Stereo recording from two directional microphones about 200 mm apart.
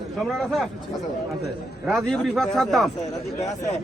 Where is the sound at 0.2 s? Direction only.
Centre (ahead or behind).